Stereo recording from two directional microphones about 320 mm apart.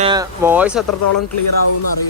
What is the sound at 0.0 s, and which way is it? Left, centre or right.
Speech, centre.